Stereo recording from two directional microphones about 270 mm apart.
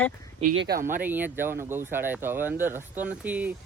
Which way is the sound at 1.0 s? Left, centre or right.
Centre.